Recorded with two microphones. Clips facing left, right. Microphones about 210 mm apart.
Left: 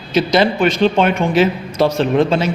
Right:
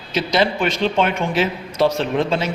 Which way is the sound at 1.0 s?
45° left (ahead or behind).